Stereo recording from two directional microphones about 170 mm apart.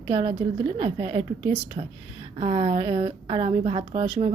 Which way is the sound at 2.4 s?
35° right (ahead or behind).